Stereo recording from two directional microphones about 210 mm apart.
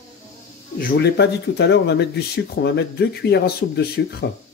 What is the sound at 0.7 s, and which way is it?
Speech, 45° left (ahead or behind).